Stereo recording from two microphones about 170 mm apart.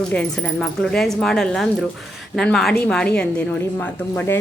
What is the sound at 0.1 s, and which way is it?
A woman's voice, 5° left (ahead or behind).